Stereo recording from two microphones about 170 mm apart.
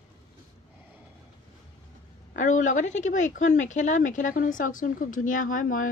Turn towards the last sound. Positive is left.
turn(degrees=50)  # may be behind; listen again after turning